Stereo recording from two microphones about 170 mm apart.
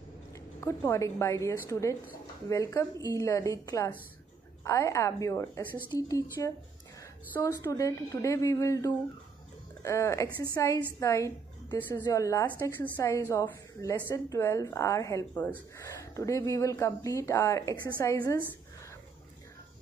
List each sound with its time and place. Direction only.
0.6 s a woman's voice: 15° left (ahead or behind)
10.2 s a woman's voice: 10° right (ahead or behind)
10.5 s a woman's voice: 20° left (ahead or behind)